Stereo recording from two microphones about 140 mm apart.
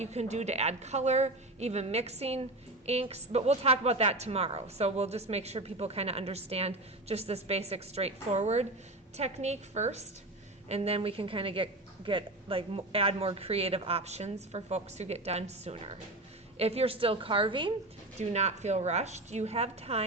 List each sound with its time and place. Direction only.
0.0 s a woman's voice: 50° right (ahead or behind); by 17.7 s 35° right (ahead or behind)
18.2 s a woman's voice: 50° right (ahead or behind)